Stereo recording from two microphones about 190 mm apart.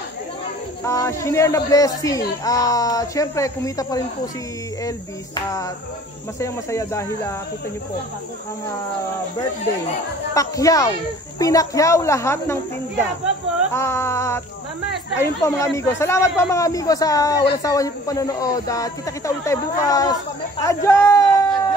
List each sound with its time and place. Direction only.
0.8 s speech: 15° left (ahead or behind)
6.4 s speech: 15° left (ahead or behind)
10.3 s speech: 15° left (ahead or behind)
13.7 s speech: 15° left (ahead or behind)
20.6 s a sound: 15° left (ahead or behind)